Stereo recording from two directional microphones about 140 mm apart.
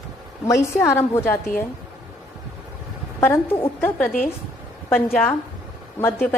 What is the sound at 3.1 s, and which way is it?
A woman's voice, 15° left (ahead or behind).